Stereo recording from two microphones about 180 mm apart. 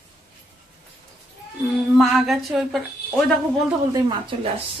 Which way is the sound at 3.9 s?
25° right (ahead or behind).